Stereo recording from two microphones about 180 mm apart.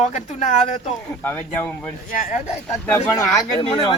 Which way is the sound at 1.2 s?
10° left (ahead or behind).